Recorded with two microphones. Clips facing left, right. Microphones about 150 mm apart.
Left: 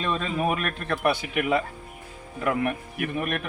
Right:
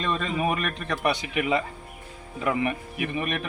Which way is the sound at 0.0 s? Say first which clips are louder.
Even; 5° left (ahead or behind).